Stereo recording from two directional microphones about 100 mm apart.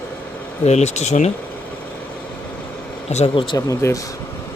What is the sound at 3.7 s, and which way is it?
Speech, 30° left (ahead or behind).